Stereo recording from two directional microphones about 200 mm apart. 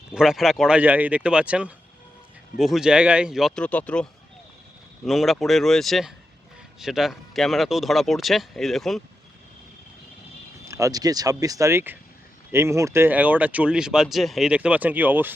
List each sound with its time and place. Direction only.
0.1 s speech: centre (ahead or behind)
10.7 s speech: 15° right (ahead or behind)